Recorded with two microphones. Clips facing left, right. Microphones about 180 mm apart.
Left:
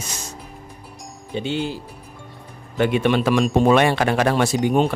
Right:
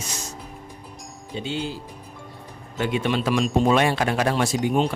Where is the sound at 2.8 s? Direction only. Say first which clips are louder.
Left 5 dB; 65° left (ahead or behind).